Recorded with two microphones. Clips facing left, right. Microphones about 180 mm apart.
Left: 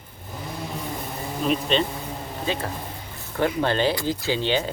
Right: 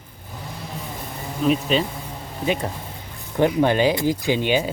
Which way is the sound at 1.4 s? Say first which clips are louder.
Right 3 dB; 5° right (ahead or behind).